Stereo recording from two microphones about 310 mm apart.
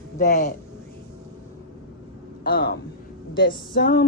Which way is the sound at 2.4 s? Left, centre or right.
Left.